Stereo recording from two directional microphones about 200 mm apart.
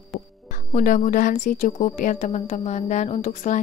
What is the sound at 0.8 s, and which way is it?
Speech, 40° left (ahead or behind).